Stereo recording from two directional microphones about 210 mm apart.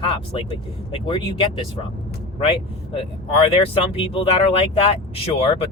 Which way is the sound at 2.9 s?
25° left (ahead or behind).